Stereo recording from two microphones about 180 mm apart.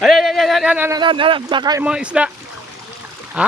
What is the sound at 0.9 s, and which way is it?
Speech, 25° right (ahead or behind).